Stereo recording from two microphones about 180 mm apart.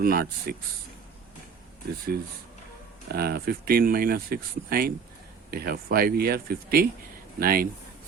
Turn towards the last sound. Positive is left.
turn(degrees=-55)  # may be behind; listen again after turning